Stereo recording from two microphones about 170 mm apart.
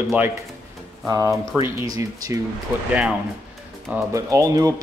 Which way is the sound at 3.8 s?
20° right (ahead or behind).